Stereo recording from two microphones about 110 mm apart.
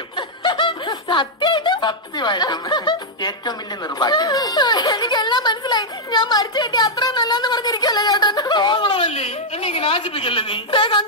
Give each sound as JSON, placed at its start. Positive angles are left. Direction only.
{"t": 0.1, "sound": "snicker", "side_deg": 45}